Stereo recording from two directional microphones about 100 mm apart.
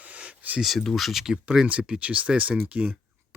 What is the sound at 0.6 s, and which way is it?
Speech, centre (ahead or behind).